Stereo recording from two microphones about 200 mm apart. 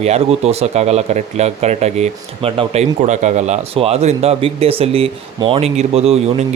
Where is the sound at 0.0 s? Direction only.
30° right (ahead or behind).